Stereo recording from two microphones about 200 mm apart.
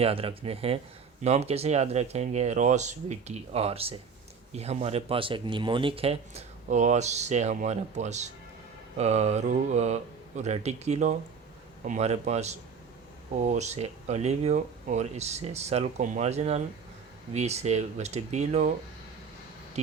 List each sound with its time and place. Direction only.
0.0 s speech: 30° right (ahead or behind)